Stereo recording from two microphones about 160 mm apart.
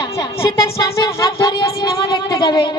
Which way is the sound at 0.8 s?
20° left (ahead or behind).